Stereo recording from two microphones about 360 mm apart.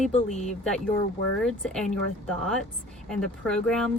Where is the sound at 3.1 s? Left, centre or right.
Centre.